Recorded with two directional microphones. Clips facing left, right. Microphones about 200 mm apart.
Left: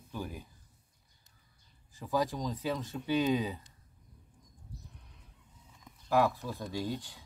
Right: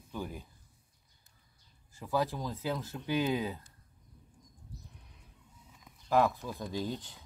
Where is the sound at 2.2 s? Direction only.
15° left (ahead or behind).